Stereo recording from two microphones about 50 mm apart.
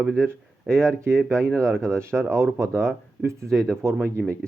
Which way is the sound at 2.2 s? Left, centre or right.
Right.